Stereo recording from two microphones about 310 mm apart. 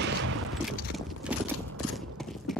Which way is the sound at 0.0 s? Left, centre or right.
Right.